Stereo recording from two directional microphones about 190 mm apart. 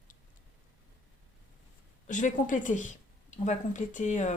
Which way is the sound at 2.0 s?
40° left (ahead or behind).